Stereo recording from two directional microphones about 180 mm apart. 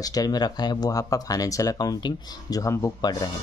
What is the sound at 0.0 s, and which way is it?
Speech, 20° left (ahead or behind).